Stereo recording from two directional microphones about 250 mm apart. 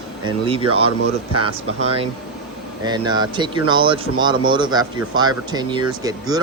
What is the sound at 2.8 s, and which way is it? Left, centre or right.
Speech, centre.